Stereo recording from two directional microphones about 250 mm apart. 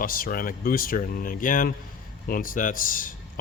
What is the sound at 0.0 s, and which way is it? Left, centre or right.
Speech, left.